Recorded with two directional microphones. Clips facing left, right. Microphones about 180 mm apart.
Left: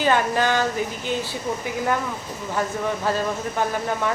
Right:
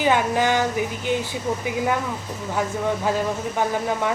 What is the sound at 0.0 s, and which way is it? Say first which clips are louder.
Speech: right 1 dB; 15° right (ahead or behind).